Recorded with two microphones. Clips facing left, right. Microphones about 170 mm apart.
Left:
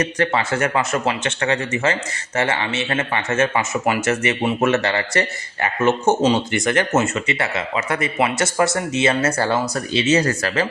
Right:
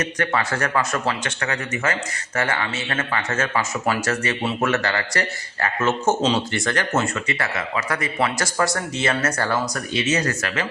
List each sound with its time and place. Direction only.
0.0 s speech: 25° left (ahead or behind)